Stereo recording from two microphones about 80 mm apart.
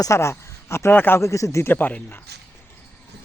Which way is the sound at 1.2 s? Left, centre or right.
Left.